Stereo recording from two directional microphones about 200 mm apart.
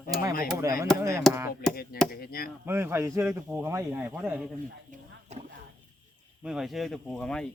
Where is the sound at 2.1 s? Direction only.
50° left (ahead or behind).